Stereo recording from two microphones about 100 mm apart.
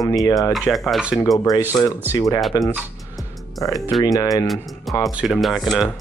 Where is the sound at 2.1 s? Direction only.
35° left (ahead or behind).